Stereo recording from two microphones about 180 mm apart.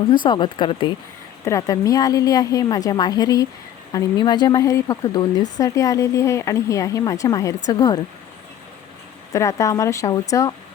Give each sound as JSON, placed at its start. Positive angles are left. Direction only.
{"t": 0.1, "sound": "a woman's voice", "side_deg": 25}
{"t": 9.3, "sound": "speech", "side_deg": 15}